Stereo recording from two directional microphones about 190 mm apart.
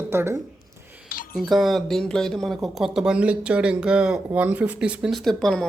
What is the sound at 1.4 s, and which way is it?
Speech, centre (ahead or behind).